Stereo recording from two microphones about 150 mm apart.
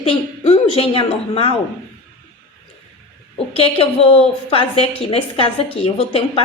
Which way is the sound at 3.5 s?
40° left (ahead or behind).